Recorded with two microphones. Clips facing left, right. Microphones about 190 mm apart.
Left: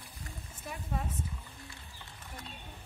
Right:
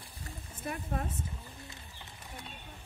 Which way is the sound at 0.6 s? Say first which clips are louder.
Right 3 dB; 55° right (ahead or behind).